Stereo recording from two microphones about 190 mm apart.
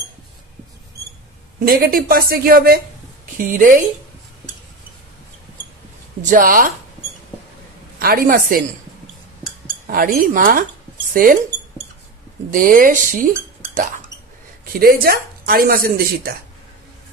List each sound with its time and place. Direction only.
1.6 s speech: 50° right (ahead or behind)
6.2 s speech: 45° right (ahead or behind)
8.0 s speech: 50° right (ahead or behind)
9.8 s speech: 50° right (ahead or behind)
12.4 s speech: 45° right (ahead or behind)
14.6 s speech: 50° right (ahead or behind)